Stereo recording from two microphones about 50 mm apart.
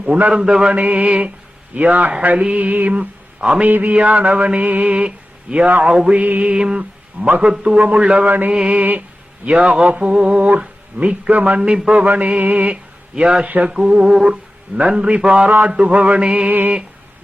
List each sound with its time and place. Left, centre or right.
0.3 s a man's voice: centre
0.7 s speech: right
1.7 s music: right
2.2 s speech: right
3.6 s music: right
3.9 s speech: right
4.4 s mantra: right
6.1 s speech: right
6.5 s speech: centre
8.3 s music: right
9.6 s speech: centre
12.0 s music: right
12.7 s speech: right
15.4 s speech: right